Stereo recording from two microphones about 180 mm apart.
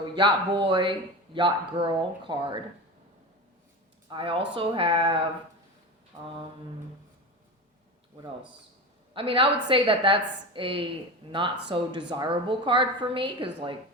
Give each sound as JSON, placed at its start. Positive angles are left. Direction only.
{"t": 0.2, "sound": "speech", "side_deg": -25}
{"t": 4.1, "sound": "speech", "side_deg": -30}
{"t": 6.2, "sound": "speech", "side_deg": -30}
{"t": 9.1, "sound": "speech", "side_deg": -30}